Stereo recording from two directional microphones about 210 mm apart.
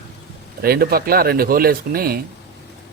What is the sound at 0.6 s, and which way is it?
Speech, 45° right (ahead or behind).